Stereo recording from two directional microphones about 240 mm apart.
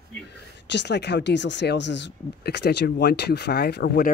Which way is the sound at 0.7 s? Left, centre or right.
Left.